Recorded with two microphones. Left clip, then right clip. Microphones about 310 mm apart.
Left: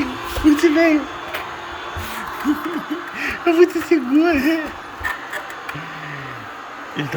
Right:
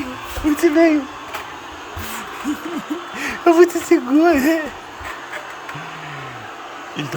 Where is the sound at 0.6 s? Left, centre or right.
Centre.